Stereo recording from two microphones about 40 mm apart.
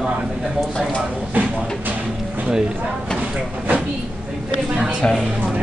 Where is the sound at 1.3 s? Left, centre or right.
Right.